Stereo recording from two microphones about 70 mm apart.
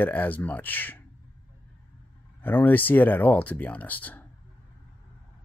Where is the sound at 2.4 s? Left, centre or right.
Left.